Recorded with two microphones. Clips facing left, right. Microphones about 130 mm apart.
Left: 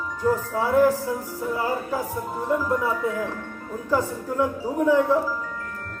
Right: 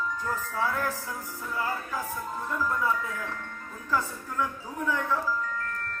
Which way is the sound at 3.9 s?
15° left (ahead or behind).